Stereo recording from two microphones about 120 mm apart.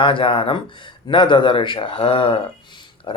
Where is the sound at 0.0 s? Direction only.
45° left (ahead or behind).